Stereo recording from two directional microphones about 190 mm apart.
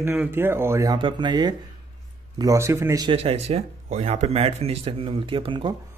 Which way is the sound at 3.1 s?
30° right (ahead or behind).